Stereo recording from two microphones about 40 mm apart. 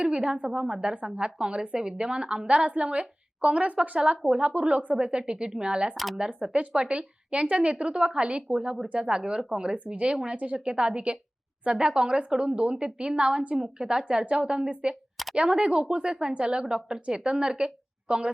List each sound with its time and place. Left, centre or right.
0.0 s a woman's voice: right
2.6 s a woman's voice: right
9.7 s a woman's voice: right